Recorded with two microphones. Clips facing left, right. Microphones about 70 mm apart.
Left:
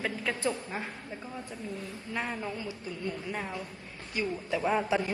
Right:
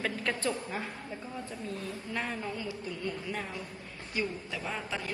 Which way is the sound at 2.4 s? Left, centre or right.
Left.